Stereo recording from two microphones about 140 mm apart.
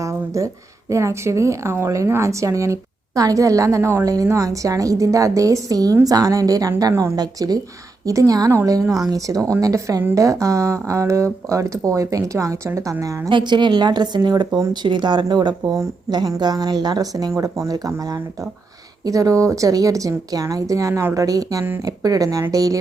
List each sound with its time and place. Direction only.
0.0 s a woman's voice: 20° right (ahead or behind)